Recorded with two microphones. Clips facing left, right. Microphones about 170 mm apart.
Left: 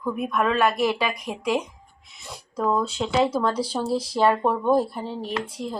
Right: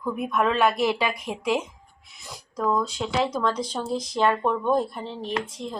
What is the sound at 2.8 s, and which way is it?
Speech, 30° left (ahead or behind).